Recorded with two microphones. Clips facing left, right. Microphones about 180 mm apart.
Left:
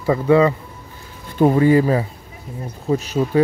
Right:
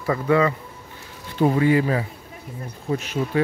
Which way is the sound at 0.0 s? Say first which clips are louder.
Left 5 dB; 25° left (ahead or behind).